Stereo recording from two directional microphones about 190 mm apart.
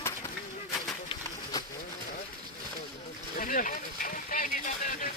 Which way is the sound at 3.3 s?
45° left (ahead or behind).